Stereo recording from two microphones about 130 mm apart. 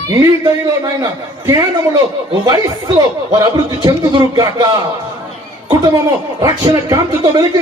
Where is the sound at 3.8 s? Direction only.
30° right (ahead or behind).